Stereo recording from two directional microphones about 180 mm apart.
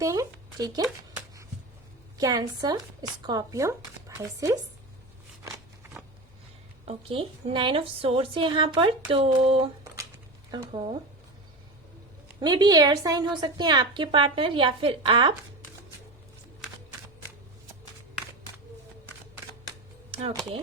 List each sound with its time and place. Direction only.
0.0 s a woman's voice: 20° right (ahead or behind)
2.1 s a woman's voice: 20° right (ahead or behind)
5.4 s a sound: 15° right (ahead or behind)
6.8 s a woman's voice: 30° right (ahead or behind)
9.8 s a sound: 15° right (ahead or behind)
10.5 s a woman's voice: 30° right (ahead or behind)
12.4 s a woman's voice: 25° right (ahead or behind)
20.1 s speech: 30° right (ahead or behind)